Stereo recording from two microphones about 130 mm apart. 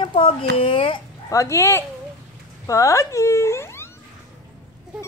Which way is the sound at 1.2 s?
20° left (ahead or behind).